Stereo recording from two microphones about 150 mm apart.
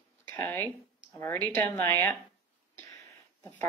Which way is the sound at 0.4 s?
15° left (ahead or behind).